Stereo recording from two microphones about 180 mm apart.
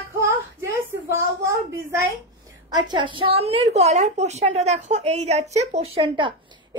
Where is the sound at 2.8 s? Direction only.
25° right (ahead or behind).